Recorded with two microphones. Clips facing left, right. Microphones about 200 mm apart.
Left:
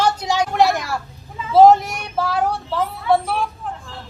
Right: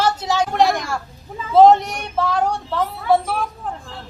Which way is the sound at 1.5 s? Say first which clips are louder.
Even; centre (ahead or behind).